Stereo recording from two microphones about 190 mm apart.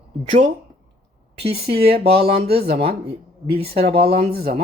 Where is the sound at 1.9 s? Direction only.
30° right (ahead or behind).